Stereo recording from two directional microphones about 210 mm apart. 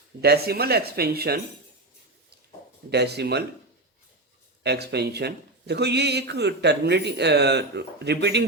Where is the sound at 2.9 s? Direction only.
50° right (ahead or behind).